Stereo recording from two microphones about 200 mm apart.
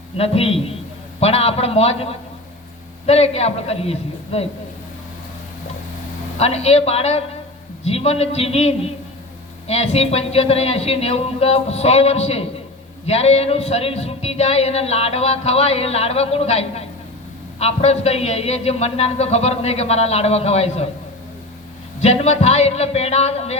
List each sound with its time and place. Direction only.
0.2 s a man's voice: 30° left (ahead or behind)
6.4 s speech: 30° left (ahead or behind)
22.0 s speech: 30° left (ahead or behind)